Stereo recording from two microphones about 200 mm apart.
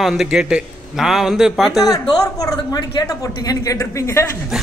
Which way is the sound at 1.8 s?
15° left (ahead or behind).